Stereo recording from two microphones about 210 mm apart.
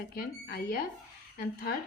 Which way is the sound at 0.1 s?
45° left (ahead or behind).